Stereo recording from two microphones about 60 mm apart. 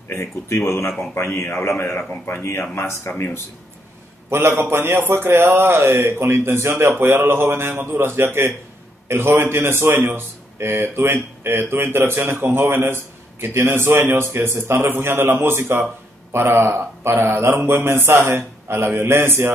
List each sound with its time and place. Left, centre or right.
0.1 s a man's voice: left
2.0 s speech: left
2.7 s a man's voice: left
4.3 s a man's voice: right